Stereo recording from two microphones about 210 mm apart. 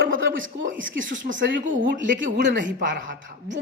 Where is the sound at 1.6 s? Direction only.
40° right (ahead or behind).